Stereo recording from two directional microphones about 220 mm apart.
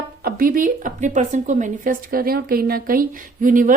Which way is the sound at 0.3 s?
40° right (ahead or behind).